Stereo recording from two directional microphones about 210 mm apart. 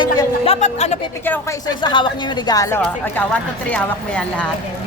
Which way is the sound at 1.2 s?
10° left (ahead or behind).